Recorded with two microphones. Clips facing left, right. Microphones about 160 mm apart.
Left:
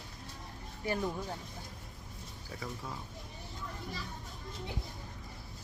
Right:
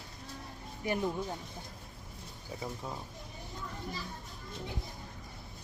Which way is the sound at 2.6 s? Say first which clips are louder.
Right 2 dB; 25° right (ahead or behind).